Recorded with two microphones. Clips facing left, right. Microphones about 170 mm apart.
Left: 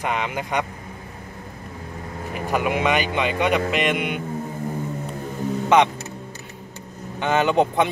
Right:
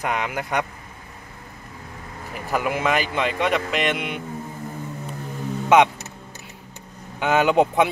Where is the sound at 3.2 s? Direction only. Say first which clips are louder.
Left 2 dB; centre (ahead or behind).